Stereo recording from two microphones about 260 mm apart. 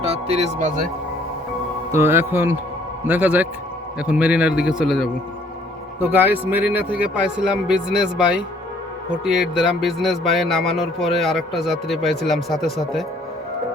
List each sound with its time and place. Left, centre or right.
0.0 s speech: right
1.9 s speech: centre